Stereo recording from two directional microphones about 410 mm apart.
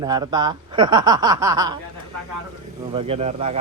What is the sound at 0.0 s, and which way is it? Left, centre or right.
Speech, centre.